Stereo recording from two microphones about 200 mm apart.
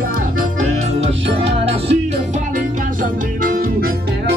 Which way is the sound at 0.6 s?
30° right (ahead or behind).